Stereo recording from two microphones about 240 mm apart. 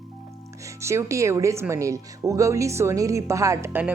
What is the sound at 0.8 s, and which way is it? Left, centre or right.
Speech, centre.